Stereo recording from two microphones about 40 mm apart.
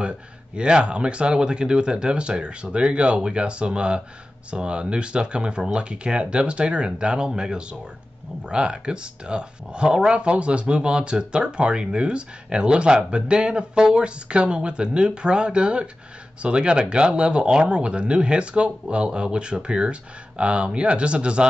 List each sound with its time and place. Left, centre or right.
0.6 s speech: right